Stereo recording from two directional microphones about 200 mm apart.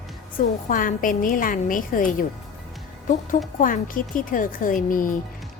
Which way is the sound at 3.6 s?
45° left (ahead or behind).